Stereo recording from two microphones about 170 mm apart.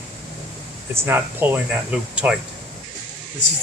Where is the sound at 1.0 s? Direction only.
10° right (ahead or behind).